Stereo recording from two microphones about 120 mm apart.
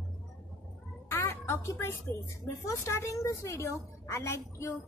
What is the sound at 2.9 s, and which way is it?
A woman's voice, 25° left (ahead or behind).